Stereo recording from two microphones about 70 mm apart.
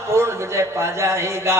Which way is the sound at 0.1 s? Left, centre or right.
Right.